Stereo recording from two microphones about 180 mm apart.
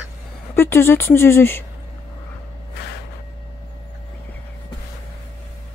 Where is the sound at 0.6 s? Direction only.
15° left (ahead or behind).